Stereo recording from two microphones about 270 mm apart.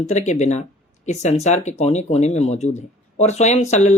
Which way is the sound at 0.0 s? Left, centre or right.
Left.